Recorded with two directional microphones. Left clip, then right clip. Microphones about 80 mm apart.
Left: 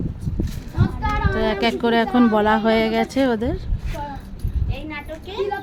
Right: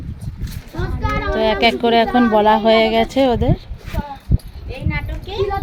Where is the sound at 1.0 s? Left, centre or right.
Centre.